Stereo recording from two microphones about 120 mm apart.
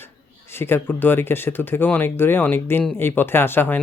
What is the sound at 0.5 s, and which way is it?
Speech, 20° left (ahead or behind).